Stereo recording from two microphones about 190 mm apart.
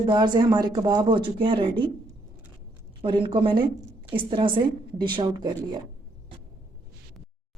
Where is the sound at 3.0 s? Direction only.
25° right (ahead or behind).